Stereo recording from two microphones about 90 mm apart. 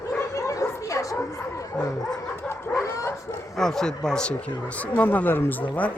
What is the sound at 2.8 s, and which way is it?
Dog, 35° left (ahead or behind).